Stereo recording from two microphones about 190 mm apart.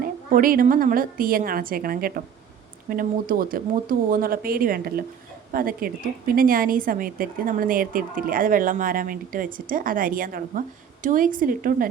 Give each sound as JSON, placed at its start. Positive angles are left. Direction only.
{"t": 0.0, "sound": "a woman's voice", "side_deg": -45}